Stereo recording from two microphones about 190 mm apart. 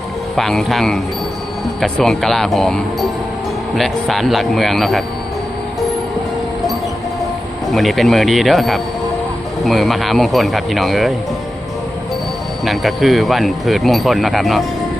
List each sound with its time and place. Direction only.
0.3 s speech: centre (ahead or behind)
7.7 s speech: centre (ahead or behind)
12.6 s speech: centre (ahead or behind)